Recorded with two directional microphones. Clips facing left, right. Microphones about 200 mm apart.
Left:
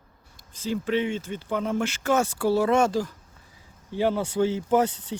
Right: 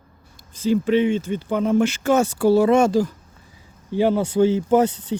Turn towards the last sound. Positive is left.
turn(degrees=-20)  # may be behind; listen again after turning